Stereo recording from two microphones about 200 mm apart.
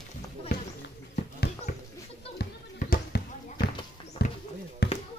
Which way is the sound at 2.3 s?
50° left (ahead or behind).